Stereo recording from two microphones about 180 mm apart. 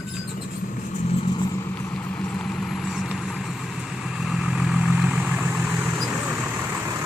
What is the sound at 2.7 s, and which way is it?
Vehicle, centre (ahead or behind).